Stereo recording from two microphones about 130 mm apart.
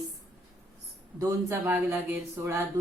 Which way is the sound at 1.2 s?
25° right (ahead or behind).